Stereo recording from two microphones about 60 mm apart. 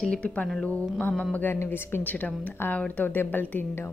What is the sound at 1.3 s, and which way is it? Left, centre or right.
Speech, left.